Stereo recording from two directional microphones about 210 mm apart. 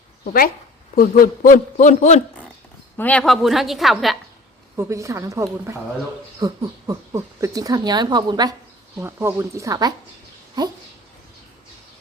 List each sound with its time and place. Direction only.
0.9 s a man's voice: 40° left (ahead or behind)
3.0 s a woman's voice: 5° left (ahead or behind)
4.8 s speech: 15° right (ahead or behind)